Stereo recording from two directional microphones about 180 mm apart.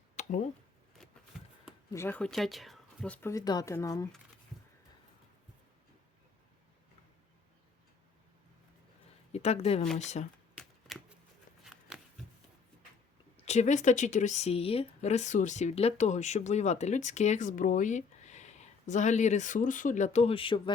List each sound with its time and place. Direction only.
0.2 s a sound: 40° left (ahead or behind)
1.9 s speech: 15° left (ahead or behind)
9.3 s speech: 35° left (ahead or behind)
10.6 s shuffling cards: centre (ahead or behind)
11.6 s a sound: centre (ahead or behind)
13.3 s speech: 35° left (ahead or behind)